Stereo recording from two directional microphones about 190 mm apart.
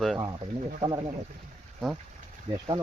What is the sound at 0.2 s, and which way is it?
Speech, 20° right (ahead or behind).